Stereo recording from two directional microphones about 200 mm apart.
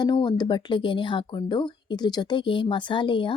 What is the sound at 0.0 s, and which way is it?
Speech, 20° left (ahead or behind).